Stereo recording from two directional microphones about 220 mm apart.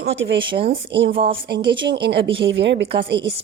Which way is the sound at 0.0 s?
55° right (ahead or behind).